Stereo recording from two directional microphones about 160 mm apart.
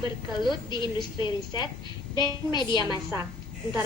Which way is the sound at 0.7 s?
30° left (ahead or behind).